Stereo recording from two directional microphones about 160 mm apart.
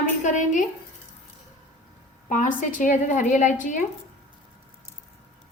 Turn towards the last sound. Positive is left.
turn(degrees=50)  # may be behind; listen again after turning